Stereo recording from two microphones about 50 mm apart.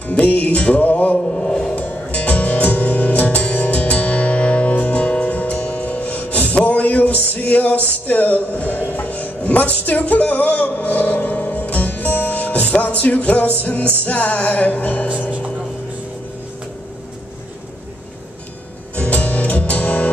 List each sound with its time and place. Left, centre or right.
0.1 s music: left
0.6 s mantra: left
1.5 s music: centre
1.8 s music: left
8.1 s speech: left
14.0 s music: left
18.9 s music: left